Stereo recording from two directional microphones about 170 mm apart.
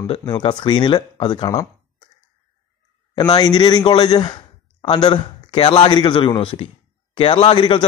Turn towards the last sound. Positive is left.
turn(degrees=25)  # may be behind; listen again after turning